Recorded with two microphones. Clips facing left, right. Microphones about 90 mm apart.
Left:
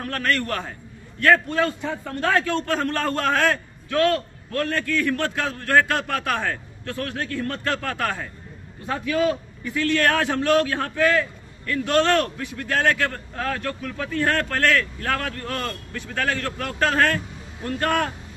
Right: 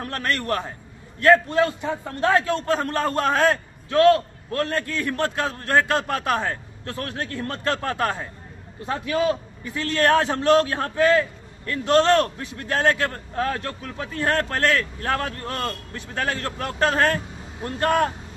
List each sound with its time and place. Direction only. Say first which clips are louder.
0.1 s a man's voice: left 1 dB; 25° right (ahead or behind)